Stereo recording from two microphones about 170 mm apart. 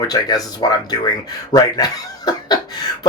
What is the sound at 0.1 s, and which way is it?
Speech, 25° left (ahead or behind).